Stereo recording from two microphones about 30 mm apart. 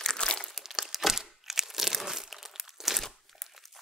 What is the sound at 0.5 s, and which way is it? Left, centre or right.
Crumpling, centre.